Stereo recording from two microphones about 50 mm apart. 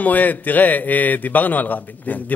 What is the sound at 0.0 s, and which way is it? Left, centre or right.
Speech, left.